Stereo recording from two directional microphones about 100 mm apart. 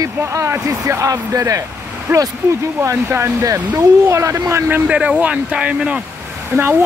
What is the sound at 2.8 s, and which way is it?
Speech, 30° right (ahead or behind).